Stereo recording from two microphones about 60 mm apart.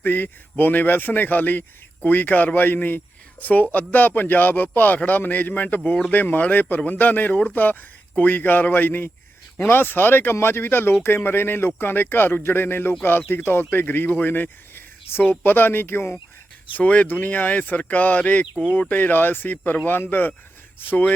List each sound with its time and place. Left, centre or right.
0.0 s speech: left
16.7 s speech: left